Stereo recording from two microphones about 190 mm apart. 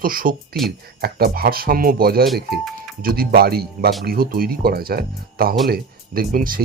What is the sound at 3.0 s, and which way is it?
Speech, 50° right (ahead or behind).